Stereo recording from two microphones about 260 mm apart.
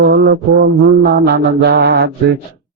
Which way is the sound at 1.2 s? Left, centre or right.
Right.